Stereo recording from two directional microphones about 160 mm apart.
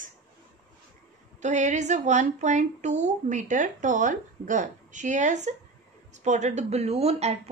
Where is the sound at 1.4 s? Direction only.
50° right (ahead or behind).